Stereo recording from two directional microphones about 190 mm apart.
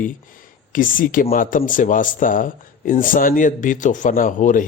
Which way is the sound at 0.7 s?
45° left (ahead or behind).